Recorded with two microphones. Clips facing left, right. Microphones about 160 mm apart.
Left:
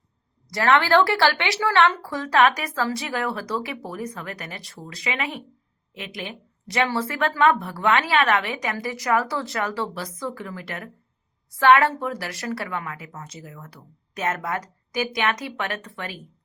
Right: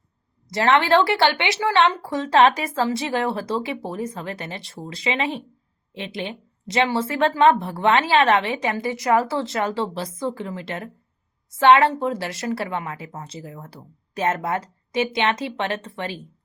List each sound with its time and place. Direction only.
0.5 s a woman's voice: 25° right (ahead or behind)